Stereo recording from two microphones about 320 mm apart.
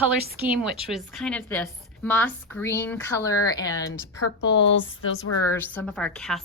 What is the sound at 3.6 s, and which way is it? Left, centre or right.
A woman's voice, left.